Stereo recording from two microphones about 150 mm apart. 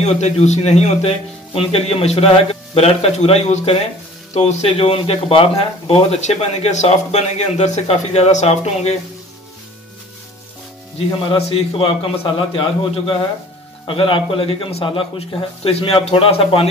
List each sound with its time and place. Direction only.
0.0 s speech: 50° left (ahead or behind)
11.2 s speech: 40° left (ahead or behind)